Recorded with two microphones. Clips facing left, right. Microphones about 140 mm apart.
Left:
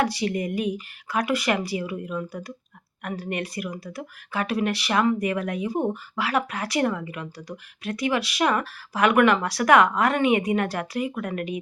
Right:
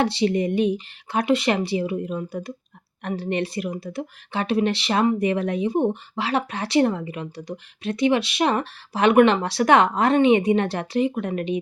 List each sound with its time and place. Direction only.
0.0 s speech: 25° right (ahead or behind)